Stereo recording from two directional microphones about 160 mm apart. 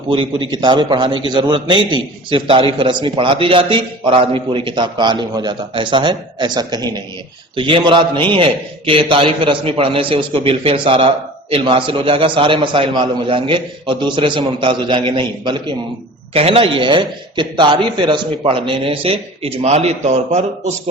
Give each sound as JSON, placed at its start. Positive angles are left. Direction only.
{"t": 0.1, "sound": "a man's voice", "side_deg": -30}